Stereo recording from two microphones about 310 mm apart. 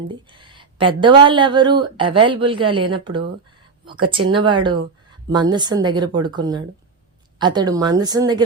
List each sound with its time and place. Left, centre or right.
0.1 s speech: centre